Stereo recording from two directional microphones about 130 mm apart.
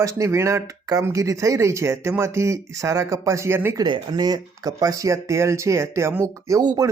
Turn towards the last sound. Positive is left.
turn(degrees=-25)  # may be behind; listen again after turning